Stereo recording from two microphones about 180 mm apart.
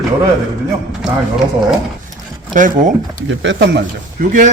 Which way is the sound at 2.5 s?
45° right (ahead or behind).